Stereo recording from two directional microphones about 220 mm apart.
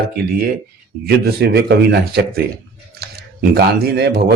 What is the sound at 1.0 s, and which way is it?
Speech, 45° right (ahead or behind).